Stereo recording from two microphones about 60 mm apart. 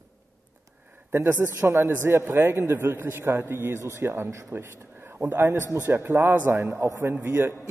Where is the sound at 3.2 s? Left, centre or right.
Right.